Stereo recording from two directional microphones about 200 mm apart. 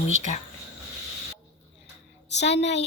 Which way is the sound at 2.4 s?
60° left (ahead or behind).